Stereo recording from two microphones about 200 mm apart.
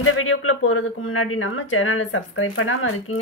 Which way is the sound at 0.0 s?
90° left.